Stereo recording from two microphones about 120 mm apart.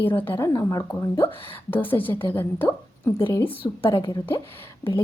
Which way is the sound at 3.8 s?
45° left (ahead or behind).